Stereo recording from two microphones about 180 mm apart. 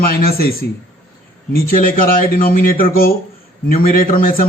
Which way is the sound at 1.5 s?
55° left (ahead or behind).